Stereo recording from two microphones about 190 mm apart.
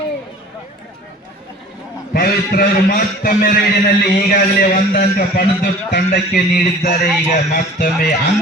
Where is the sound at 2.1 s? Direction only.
50° left (ahead or behind).